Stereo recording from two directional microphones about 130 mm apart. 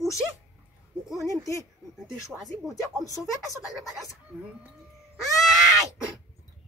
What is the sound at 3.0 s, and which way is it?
Speech, 25° left (ahead or behind).